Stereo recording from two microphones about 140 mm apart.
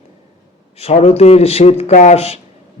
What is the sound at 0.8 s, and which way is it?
A man's voice, 45° left (ahead or behind).